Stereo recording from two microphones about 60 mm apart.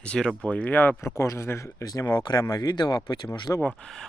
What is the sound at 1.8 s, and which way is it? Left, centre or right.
Speech, left.